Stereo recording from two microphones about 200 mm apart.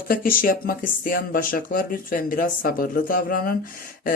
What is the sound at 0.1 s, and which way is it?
Mantra, 45° left (ahead or behind).